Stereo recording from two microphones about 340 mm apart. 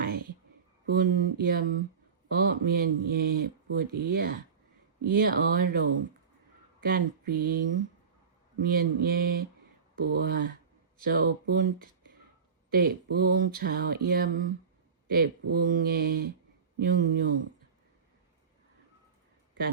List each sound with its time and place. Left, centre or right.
0.9 s speech: right
6.8 s speech: right
12.7 s speech: right